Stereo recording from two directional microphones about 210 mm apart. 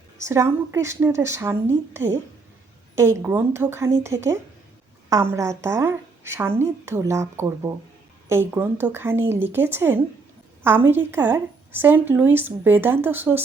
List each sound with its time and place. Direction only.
0.3 s a woman's voice: 15° right (ahead or behind)